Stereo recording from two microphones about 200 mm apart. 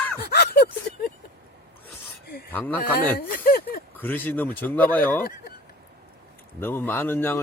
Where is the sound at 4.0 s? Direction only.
10° left (ahead or behind).